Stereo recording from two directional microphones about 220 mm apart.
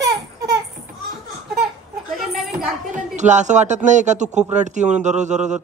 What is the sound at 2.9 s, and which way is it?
A man's voice, 30° right (ahead or behind).